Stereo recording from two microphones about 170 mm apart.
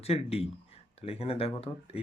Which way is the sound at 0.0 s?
35° left (ahead or behind).